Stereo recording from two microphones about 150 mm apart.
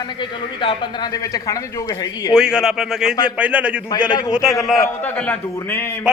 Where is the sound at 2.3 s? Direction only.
5° right (ahead or behind).